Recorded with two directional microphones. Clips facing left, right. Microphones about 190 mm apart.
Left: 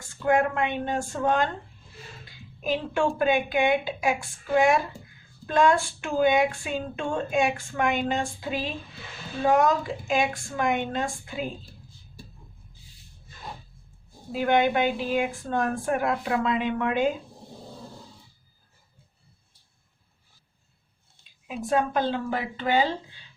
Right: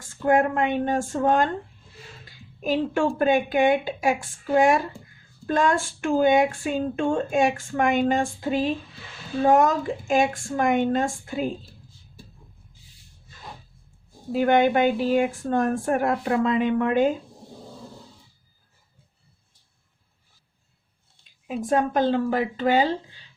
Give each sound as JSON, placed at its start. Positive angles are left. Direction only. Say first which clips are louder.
{"t": 0.3, "sound": "speech", "louder": "right 3 dB", "side_deg": -50}
{"t": 2.6, "sound": "speech", "louder": "right 3 dB", "side_deg": -45}
{"t": 14.3, "sound": "speech", "louder": "right 3 dB", "side_deg": -45}
{"t": 21.4, "sound": "speech", "louder": "right 2 dB", "side_deg": -45}